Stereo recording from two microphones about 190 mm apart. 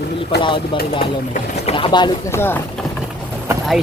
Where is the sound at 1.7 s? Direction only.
30° left (ahead or behind).